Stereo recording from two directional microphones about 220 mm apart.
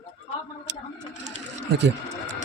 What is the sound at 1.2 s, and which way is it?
Sewing machine, 30° right (ahead or behind).